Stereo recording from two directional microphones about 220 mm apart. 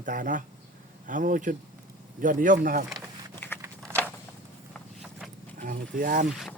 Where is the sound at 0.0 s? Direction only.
35° right (ahead or behind).